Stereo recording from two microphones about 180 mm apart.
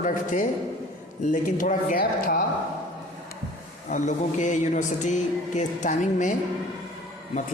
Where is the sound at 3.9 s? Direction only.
45° left (ahead or behind).